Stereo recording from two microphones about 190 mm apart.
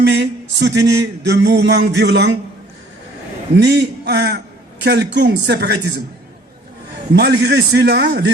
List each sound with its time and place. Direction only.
0.1 s a sound: 65° right (ahead or behind)
1.3 s a man's voice: 60° right (ahead or behind)
3.5 s a man's voice: 65° right (ahead or behind)
7.1 s a man's voice: 60° right (ahead or behind)